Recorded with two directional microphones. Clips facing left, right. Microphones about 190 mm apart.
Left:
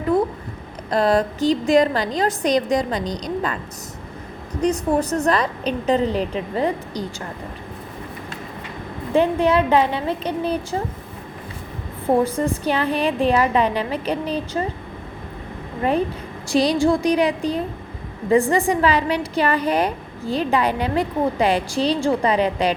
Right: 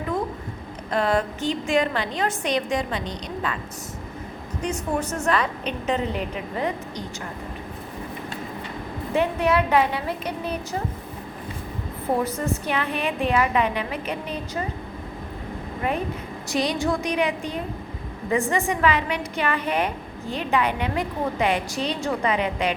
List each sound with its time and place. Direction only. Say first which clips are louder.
0.1 s a sound: left 8 dB; 35° left (ahead or behind)
0.9 s a woman's voice: left 4 dB; 35° left (ahead or behind)
4.6 s a woman's voice: left 7 dB; 35° left (ahead or behind)
9.1 s a woman's voice: left 4 dB; 30° left (ahead or behind)
12.2 s a woman's voice: left 5 dB; 30° left (ahead or behind)
16.5 s a woman's voice: left 7 dB; 30° left (ahead or behind)